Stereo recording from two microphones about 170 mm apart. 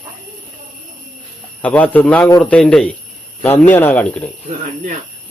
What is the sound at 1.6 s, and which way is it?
Speech, 10° left (ahead or behind).